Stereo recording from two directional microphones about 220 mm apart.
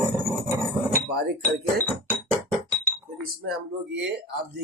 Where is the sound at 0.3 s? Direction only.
10° right (ahead or behind).